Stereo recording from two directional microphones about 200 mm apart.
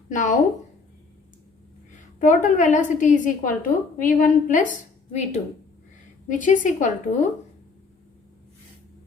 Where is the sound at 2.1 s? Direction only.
40° left (ahead or behind).